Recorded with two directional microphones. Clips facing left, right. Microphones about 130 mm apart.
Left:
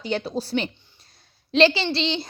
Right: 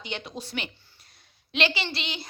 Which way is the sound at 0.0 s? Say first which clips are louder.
Left 10 dB; 35° left (ahead or behind).